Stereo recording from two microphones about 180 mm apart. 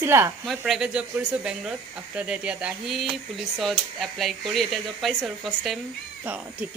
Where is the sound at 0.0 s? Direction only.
15° right (ahead or behind).